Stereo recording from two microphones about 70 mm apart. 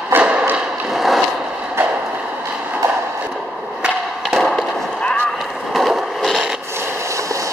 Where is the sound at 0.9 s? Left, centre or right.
Centre.